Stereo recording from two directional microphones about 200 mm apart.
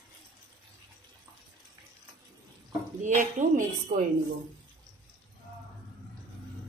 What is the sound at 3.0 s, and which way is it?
Speech, 40° right (ahead or behind).